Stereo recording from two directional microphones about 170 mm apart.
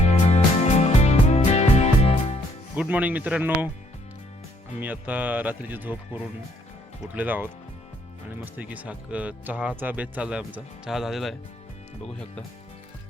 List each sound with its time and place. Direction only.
0.0 s music: 40° left (ahead or behind)
2.7 s speech: 10° right (ahead or behind)
4.8 s speech: 10° right (ahead or behind)
8.5 s speech: 10° right (ahead or behind)